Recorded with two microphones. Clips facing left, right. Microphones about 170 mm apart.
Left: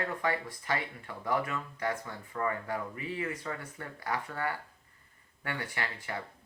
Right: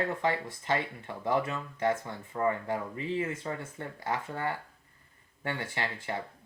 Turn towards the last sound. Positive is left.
turn(degrees=-25)  # may be behind; listen again after turning